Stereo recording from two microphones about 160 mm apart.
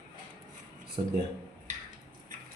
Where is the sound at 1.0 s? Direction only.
25° right (ahead or behind).